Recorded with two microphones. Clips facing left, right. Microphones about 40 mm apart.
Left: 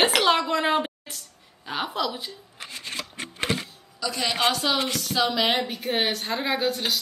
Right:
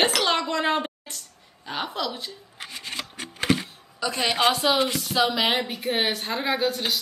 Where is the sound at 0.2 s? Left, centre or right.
Centre.